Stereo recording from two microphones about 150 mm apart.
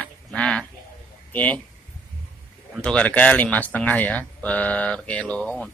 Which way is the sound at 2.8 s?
10° left (ahead or behind).